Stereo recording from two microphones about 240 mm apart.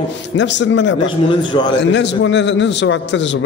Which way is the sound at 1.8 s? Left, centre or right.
Left.